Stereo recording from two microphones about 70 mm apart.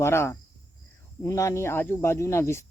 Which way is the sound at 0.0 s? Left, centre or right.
Left.